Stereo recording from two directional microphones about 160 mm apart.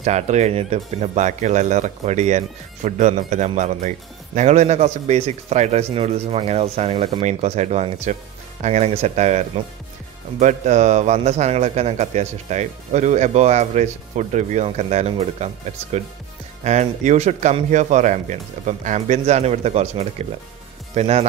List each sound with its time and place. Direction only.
0.0 s a man's voice: 45° right (ahead or behind)